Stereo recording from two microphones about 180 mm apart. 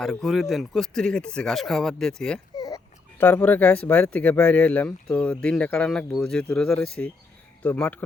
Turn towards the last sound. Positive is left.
turn(degrees=5)  # may be behind; listen again after turning